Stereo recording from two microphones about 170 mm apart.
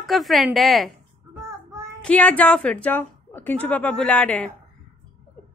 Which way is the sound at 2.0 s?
10° left (ahead or behind).